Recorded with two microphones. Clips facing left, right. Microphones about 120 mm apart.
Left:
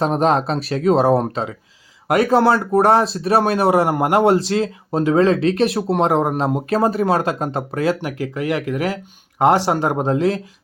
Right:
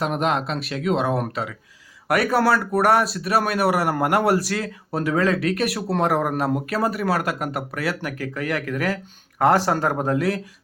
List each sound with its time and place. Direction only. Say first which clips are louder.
0.0 s speech: left 6 dB; 35° left (ahead or behind)